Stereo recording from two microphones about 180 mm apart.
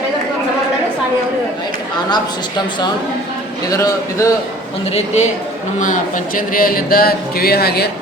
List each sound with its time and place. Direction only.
3.7 s speech: 20° left (ahead or behind)
4.9 s a man's voice: 40° left (ahead or behind); by 7.9 s 60° left (ahead or behind)